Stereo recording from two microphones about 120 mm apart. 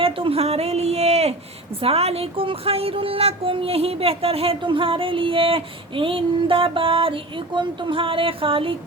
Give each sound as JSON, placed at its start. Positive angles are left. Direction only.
{"t": 0.0, "sound": "a woman's voice", "side_deg": -50}